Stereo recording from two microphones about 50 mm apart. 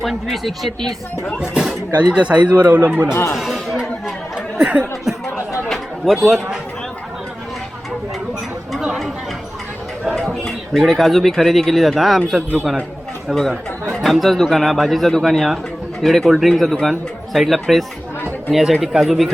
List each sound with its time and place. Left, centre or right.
0.0 s speech: centre
1.4 s speech: centre
1.9 s speech: right
2.7 s speech: right
3.1 s speech: left
3.3 s chatter: centre
4.6 s speech: right
5.6 s a sound: centre
8.7 s chatter: centre
10.2 s a sound: centre
10.9 s speech: centre
13.2 s speech: centre
18.2 s chatter: left
18.8 s speech: centre